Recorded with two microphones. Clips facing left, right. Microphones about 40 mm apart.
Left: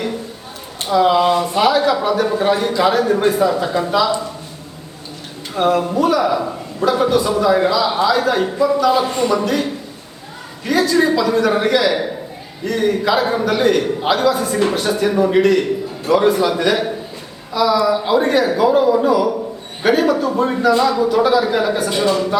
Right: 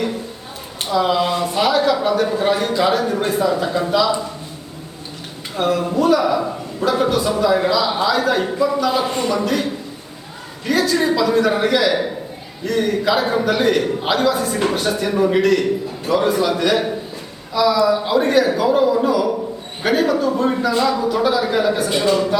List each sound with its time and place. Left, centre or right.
0.9 s a man's voice: centre
5.8 s a man's voice: centre
10.7 s a man's voice: centre